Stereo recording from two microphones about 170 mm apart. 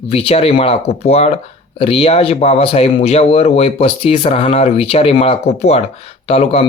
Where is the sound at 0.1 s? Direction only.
35° left (ahead or behind).